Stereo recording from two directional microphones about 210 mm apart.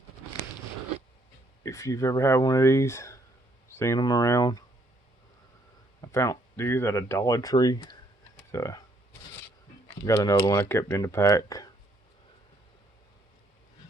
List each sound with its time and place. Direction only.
1.6 s speech: 15° left (ahead or behind)
6.1 s speech: 15° left (ahead or behind)
10.0 s speech: 15° left (ahead or behind)